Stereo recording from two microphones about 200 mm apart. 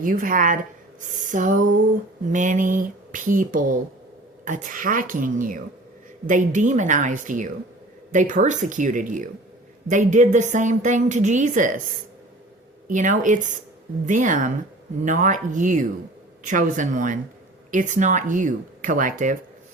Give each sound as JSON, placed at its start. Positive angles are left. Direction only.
{"t": 0.0, "sound": "a woman's voice", "side_deg": -45}
{"t": 12.9, "sound": "a woman's voice", "side_deg": -40}